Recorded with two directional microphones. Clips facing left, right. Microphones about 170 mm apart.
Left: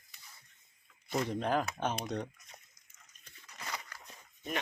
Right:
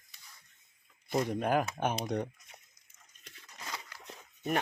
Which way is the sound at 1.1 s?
10° right (ahead or behind).